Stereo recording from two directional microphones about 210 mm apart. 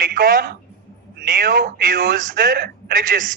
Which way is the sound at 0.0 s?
40° right (ahead or behind).